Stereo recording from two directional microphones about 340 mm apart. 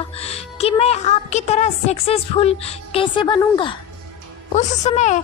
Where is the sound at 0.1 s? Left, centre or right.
Centre.